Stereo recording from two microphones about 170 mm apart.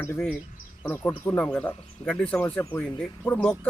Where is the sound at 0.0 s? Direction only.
10° left (ahead or behind).